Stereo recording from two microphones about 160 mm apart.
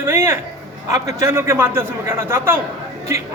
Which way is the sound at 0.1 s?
15° right (ahead or behind).